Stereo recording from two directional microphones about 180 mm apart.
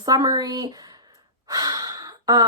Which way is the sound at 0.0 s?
20° right (ahead or behind).